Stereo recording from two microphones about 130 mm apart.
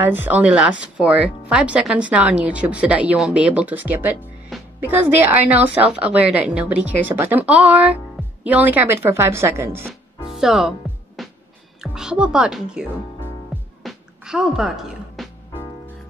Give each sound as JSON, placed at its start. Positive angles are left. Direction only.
{"t": 0.0, "sound": "speech", "side_deg": -15}
{"t": 10.3, "sound": "speech", "side_deg": -5}
{"t": 11.2, "sound": "music", "side_deg": 0}
{"t": 11.8, "sound": "a woman's voice", "side_deg": -5}
{"t": 13.8, "sound": "music", "side_deg": -5}